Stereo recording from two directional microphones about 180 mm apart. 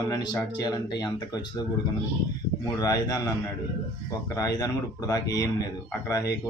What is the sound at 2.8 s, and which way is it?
Speech, 20° left (ahead or behind).